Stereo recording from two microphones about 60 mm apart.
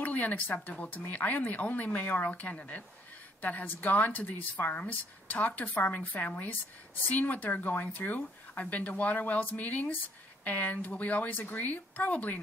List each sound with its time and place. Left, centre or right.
0.0 s a woman's voice: left